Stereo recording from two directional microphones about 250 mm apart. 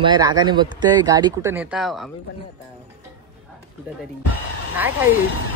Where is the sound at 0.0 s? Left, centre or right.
Centre.